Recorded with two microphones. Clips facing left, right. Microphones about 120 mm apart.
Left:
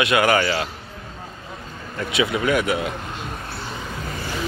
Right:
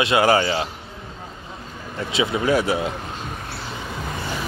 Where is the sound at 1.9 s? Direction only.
25° right (ahead or behind).